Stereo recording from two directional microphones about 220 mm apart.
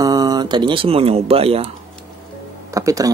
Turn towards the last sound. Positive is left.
turn(degrees=-15)  # may be behind; listen again after turning